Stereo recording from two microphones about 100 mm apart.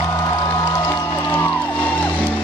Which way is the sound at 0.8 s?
20° left (ahead or behind).